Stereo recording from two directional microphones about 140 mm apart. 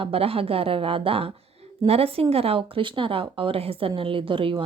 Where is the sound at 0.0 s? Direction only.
45° right (ahead or behind).